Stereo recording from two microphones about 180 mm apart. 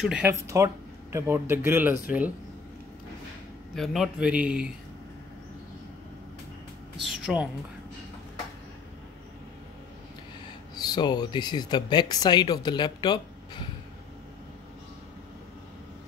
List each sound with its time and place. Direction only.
0.0 s a man's voice: 5° right (ahead or behind)
0.3 s speech: 15° right (ahead or behind)
3.7 s a man's voice: centre (ahead or behind)
7.3 s a man's voice: 5° right (ahead or behind)
10.7 s speech: 25° left (ahead or behind)